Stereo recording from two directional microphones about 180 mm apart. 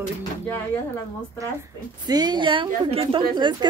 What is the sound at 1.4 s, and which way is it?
A woman's voice, 20° right (ahead or behind).